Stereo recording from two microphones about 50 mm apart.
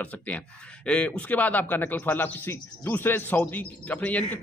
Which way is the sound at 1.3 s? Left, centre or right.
Left.